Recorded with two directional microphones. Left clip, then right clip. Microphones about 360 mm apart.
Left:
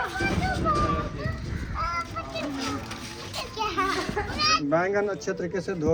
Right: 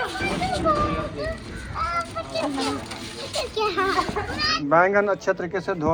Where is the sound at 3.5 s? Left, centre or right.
Centre.